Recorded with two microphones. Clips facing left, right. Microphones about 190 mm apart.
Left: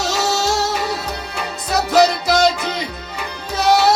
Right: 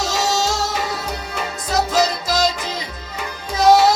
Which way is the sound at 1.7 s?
65° left (ahead or behind).